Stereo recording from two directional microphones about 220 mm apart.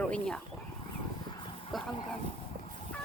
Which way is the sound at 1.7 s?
Centre (ahead or behind).